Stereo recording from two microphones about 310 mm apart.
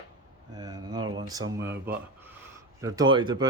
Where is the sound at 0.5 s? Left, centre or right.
Centre.